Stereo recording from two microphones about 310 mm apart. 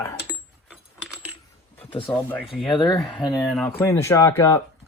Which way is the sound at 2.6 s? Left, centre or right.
Centre.